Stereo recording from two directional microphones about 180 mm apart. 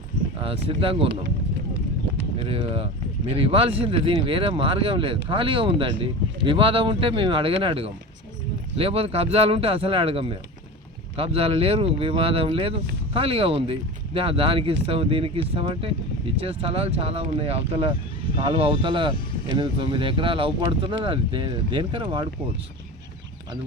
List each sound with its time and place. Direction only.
0.4 s speech: 30° right (ahead or behind)
2.5 s speech: 30° right (ahead or behind)